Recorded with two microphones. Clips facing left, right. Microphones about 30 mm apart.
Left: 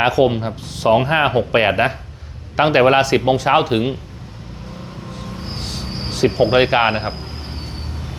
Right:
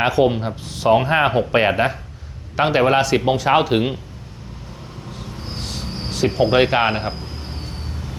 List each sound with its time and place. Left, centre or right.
0.0 s speech: centre
5.4 s a sound: centre
6.1 s speech: centre
7.2 s vehicle: left